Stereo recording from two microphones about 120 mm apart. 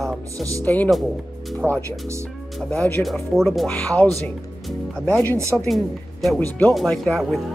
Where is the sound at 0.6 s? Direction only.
15° left (ahead or behind); by 3.7 s centre (ahead or behind).